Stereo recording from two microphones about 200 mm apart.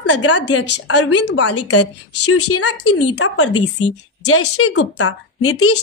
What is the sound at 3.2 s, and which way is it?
Speech, 90° left.